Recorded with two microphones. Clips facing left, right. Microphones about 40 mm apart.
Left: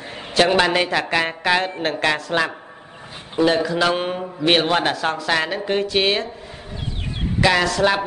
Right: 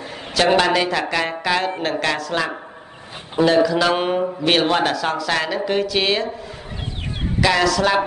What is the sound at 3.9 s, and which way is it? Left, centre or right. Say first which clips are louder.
Mantra: right 4 dB; centre.